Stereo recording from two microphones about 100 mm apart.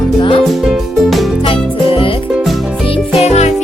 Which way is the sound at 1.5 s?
65° left (ahead or behind).